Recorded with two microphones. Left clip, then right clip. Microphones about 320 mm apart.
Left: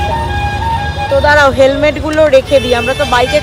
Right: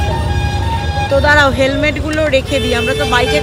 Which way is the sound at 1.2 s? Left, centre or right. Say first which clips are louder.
Left 4 dB; centre.